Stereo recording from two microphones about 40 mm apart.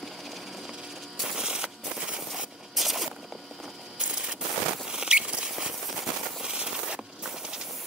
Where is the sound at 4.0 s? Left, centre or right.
Right.